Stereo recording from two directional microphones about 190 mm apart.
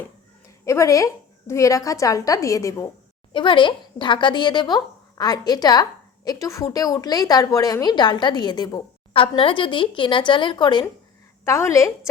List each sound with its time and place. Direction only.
0.6 s a woman's voice: 15° left (ahead or behind)